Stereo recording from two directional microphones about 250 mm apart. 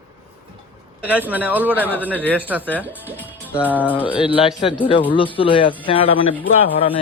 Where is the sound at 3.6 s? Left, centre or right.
Centre.